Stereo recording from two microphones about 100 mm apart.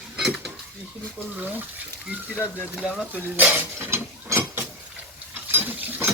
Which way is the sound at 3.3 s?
20° right (ahead or behind).